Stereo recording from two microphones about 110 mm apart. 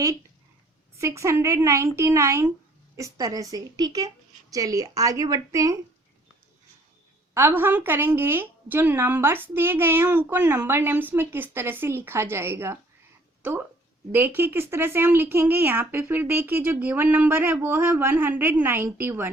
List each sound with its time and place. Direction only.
0.9 s a woman's voice: 25° right (ahead or behind)
7.3 s a woman's voice: 20° right (ahead or behind)